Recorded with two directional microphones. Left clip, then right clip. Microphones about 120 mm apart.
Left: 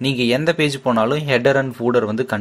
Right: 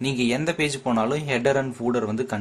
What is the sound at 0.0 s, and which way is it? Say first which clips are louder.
Speech: left 6 dB; 30° left (ahead or behind).